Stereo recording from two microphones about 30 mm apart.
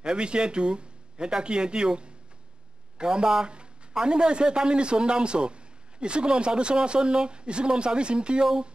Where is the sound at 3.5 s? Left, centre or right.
Right.